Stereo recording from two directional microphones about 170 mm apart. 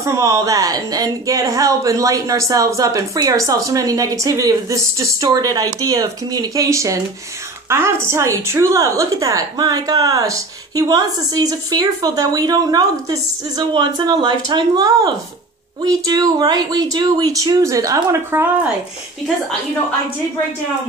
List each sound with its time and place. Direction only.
0.0 s a woman's voice: 20° right (ahead or behind)